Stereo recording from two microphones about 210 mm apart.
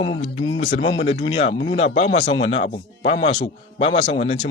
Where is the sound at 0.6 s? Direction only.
40° left (ahead or behind).